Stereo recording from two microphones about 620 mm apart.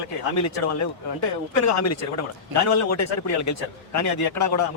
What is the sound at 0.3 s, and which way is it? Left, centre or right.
A man's voice, left.